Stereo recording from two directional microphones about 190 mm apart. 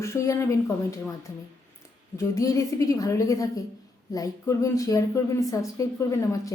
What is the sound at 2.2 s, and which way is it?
A woman's voice, 15° left (ahead or behind).